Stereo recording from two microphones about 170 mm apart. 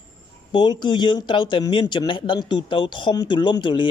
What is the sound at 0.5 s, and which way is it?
Speech, 25° left (ahead or behind).